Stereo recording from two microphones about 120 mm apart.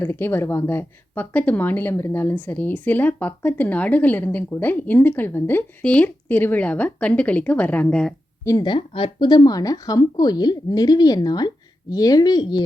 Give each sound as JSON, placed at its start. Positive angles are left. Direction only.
{"t": 0.0, "sound": "a woman's voice", "side_deg": 20}
{"t": 8.4, "sound": "speech", "side_deg": 35}